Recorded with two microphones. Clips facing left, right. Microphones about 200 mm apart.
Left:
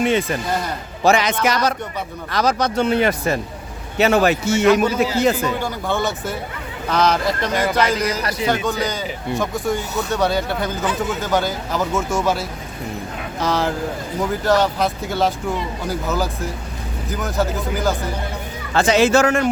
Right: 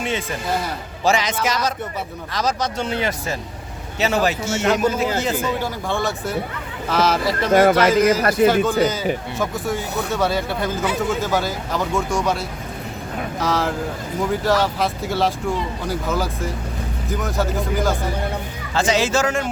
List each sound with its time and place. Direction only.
1.0 s speech: 60° left (ahead or behind)
5.5 s speech: centre (ahead or behind)
7.5 s speech: 50° right (ahead or behind)
7.8 s speech: 5° right (ahead or behind)
8.2 s speech: 55° right (ahead or behind)
8.8 s speech: 5° right (ahead or behind)
18.7 s speech: 60° left (ahead or behind)